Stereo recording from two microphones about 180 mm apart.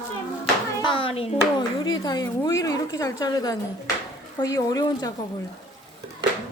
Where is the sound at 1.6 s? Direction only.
25° left (ahead or behind).